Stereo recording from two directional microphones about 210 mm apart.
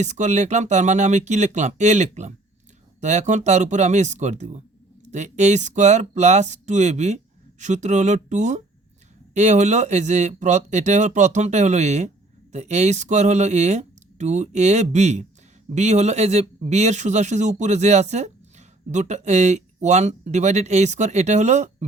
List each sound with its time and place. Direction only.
0.0 s speech: 35° right (ahead or behind)